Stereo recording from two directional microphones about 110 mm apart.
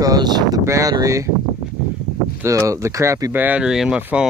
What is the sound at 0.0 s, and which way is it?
Speech, 35° right (ahead or behind).